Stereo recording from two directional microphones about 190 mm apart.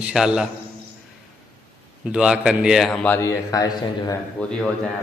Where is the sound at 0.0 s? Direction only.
5° right (ahead or behind).